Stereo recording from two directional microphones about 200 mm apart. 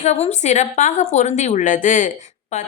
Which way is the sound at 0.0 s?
35° left (ahead or behind).